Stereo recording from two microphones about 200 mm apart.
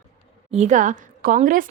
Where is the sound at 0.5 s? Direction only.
35° right (ahead or behind).